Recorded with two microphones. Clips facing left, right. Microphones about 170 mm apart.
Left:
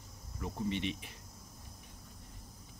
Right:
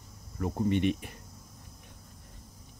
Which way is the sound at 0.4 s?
55° right (ahead or behind).